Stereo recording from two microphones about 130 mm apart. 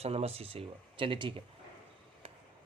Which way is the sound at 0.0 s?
55° right (ahead or behind).